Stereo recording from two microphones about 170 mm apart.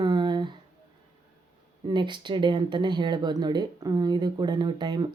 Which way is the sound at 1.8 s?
25° right (ahead or behind).